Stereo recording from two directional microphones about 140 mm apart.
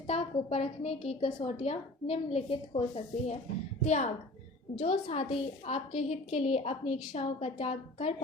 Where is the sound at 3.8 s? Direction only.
55° left (ahead or behind).